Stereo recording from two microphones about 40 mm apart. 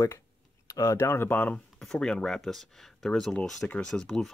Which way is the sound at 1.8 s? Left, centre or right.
Centre.